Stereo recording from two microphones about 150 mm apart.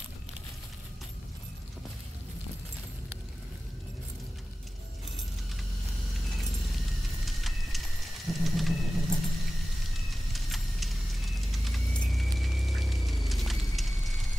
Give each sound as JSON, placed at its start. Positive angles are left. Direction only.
{"t": 7.2, "sound": "vehicle", "side_deg": 0}